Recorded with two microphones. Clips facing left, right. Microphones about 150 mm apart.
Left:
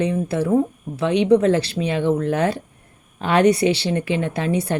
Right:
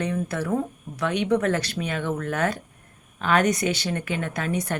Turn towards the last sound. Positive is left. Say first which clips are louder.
# left 5 dB
turn(degrees=30)  # may be behind; listen again after turning